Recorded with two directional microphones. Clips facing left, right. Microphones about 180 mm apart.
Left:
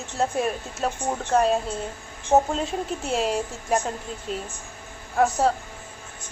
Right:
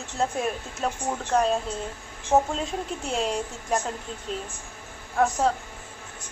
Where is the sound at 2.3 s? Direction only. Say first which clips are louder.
Left 2 dB; 25° left (ahead or behind).